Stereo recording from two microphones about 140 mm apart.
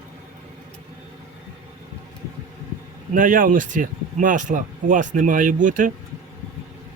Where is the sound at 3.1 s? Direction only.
75° right (ahead or behind).